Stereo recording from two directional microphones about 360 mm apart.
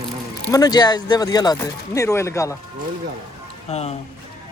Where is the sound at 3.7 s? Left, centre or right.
Centre.